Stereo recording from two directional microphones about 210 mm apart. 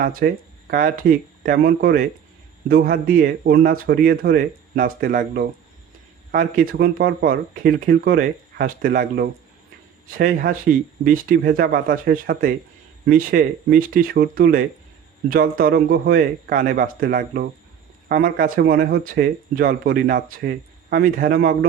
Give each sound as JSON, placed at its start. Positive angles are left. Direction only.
{"t": 0.0, "sound": "speech", "side_deg": -45}